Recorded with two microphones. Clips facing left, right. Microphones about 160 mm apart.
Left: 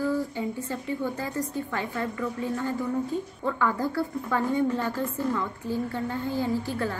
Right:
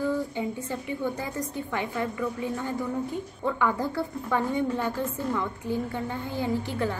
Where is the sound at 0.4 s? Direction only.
15° right (ahead or behind).